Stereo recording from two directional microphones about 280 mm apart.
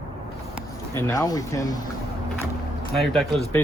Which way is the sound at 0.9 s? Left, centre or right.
Centre.